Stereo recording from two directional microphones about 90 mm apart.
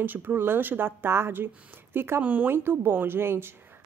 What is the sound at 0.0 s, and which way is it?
A woman's voice, 20° right (ahead or behind).